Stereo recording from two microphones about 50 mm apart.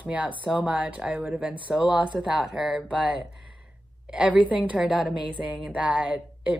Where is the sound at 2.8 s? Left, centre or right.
Right.